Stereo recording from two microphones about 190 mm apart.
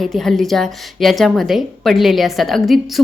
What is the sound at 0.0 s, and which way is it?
A woman's voice, centre (ahead or behind).